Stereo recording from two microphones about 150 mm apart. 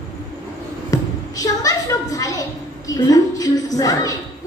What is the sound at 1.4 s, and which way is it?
A woman's voice, 25° left (ahead or behind).